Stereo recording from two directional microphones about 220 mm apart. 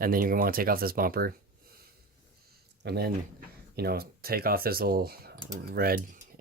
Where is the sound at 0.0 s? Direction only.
40° right (ahead or behind).